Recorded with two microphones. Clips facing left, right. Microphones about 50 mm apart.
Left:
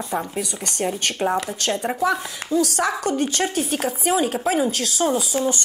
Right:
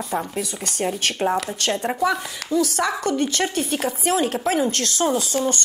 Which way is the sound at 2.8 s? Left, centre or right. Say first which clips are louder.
Even; left.